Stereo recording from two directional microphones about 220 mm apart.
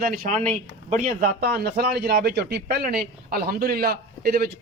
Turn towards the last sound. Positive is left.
turn(degrees=-45)  # may be behind; listen again after turning